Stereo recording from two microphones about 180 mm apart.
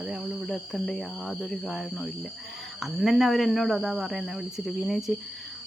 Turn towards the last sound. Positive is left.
turn(degrees=0)  # may be behind; listen again after turning